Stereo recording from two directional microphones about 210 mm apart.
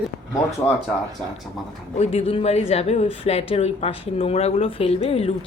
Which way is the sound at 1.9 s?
30° left (ahead or behind).